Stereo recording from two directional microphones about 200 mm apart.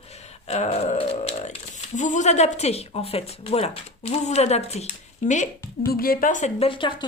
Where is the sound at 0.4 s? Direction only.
35° left (ahead or behind).